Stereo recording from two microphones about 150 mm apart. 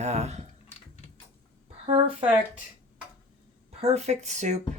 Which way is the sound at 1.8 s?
40° right (ahead or behind).